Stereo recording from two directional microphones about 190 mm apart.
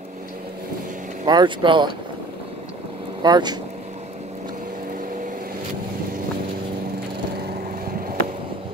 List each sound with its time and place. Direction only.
1.2 s speech: 25° right (ahead or behind)
3.2 s speech: 20° right (ahead or behind)